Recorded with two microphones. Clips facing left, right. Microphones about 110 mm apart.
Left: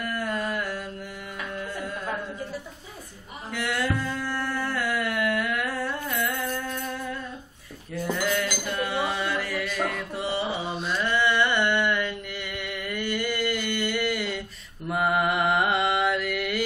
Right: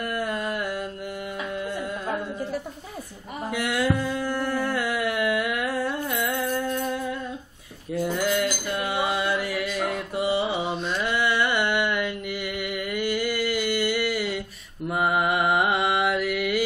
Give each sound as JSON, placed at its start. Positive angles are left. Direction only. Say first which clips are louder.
{"t": 0.0, "sound": "a sound", "louder": "right 1 dB", "side_deg": -15}
{"t": 1.5, "sound": "music", "louder": "right 2 dB", "side_deg": -15}
{"t": 3.5, "sound": "a sound", "louder": "right 3 dB", "side_deg": -10}
{"t": 8.0, "sound": "mantra", "louder": "right 2 dB", "side_deg": -10}
{"t": 10.1, "sound": "music", "louder": "right 7 dB", "side_deg": -10}
{"t": 11.0, "sound": "mantra", "louder": "left 2 dB", "side_deg": -10}